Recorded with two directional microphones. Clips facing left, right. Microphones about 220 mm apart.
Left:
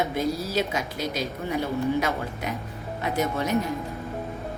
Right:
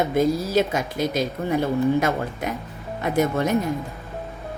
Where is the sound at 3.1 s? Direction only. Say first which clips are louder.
Right 6 dB; 50° right (ahead or behind).